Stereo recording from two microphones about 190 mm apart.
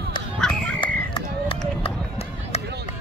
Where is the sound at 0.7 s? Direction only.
25° left (ahead or behind).